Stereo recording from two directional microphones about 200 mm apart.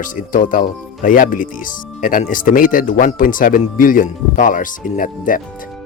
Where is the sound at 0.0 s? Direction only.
40° left (ahead or behind).